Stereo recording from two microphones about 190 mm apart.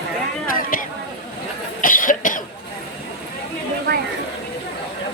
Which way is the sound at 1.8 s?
45° left (ahead or behind).